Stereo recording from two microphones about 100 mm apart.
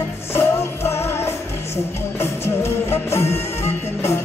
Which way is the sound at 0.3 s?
25° left (ahead or behind).